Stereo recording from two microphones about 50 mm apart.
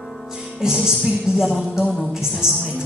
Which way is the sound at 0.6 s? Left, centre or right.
Centre.